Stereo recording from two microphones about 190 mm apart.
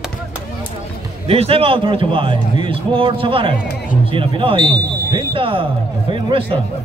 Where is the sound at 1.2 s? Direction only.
30° right (ahead or behind).